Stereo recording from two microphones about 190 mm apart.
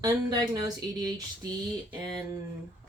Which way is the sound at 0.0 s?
20° right (ahead or behind).